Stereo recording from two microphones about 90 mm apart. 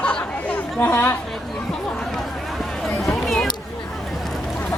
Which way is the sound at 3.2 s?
Centre (ahead or behind).